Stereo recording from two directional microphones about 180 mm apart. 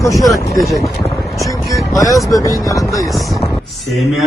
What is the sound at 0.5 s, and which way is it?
Speech, centre (ahead or behind).